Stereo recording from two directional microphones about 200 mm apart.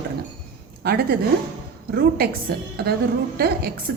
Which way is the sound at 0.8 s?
50° right (ahead or behind).